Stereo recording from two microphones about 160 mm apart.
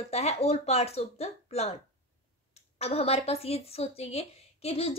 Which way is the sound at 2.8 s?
40° left (ahead or behind).